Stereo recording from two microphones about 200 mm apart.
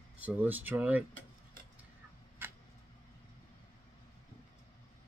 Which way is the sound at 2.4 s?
10° right (ahead or behind).